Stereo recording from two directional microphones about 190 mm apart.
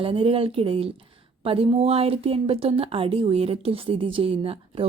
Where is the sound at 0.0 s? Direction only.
30° right (ahead or behind).